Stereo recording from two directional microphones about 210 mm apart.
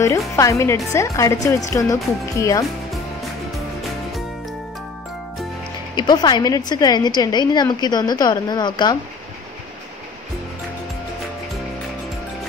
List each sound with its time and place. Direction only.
0.4 s speech: 15° left (ahead or behind)
3.5 s music: centre (ahead or behind)
5.9 s a woman's voice: 20° left (ahead or behind)